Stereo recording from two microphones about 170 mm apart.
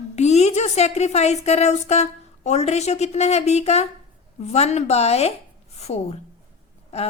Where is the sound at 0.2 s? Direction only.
40° left (ahead or behind).